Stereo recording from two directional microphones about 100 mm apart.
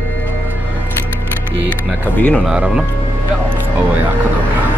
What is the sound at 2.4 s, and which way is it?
Speech, 5° right (ahead or behind).